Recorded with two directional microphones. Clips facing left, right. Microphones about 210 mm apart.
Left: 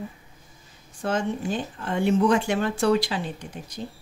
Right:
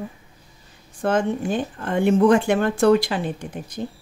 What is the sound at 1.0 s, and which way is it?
Speech, 55° right (ahead or behind).